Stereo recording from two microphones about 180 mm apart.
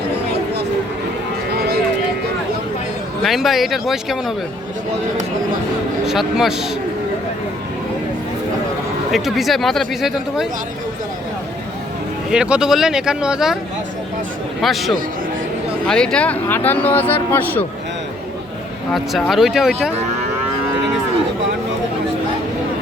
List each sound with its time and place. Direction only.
1.5 s a sound: 60° right (ahead or behind)
3.2 s speech: centre (ahead or behind)
6.1 s speech: centre (ahead or behind)
9.1 s speech: centre (ahead or behind)
12.3 s speech: 5° right (ahead or behind)
14.6 s speech: centre (ahead or behind)
18.9 s speech: centre (ahead or behind)